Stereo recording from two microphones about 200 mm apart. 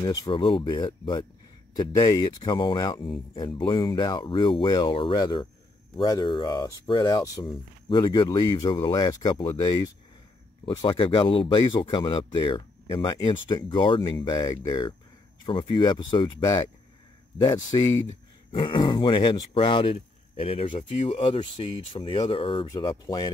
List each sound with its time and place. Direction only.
0.0 s speech: 20° left (ahead or behind)
18.0 s speech: 25° left (ahead or behind)